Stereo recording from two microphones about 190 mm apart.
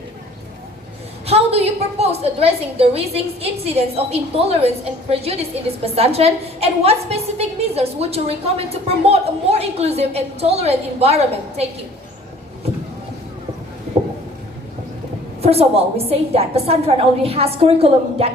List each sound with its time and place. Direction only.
1.3 s a woman's voice: 30° right (ahead or behind)
15.4 s a woman's voice: 30° right (ahead or behind)